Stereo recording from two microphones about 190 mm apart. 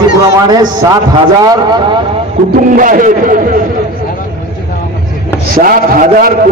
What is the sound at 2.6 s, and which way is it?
Speech, 45° right (ahead or behind).